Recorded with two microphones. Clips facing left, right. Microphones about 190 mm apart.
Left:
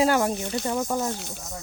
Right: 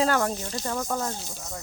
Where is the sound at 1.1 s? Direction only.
60° left (ahead or behind).